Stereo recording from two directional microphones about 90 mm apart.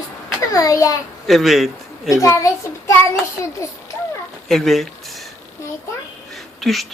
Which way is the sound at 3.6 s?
35° left (ahead or behind).